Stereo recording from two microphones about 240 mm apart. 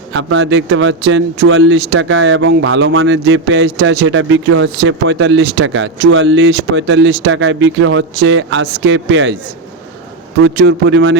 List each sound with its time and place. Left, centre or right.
0.1 s speech: right
10.4 s speech: right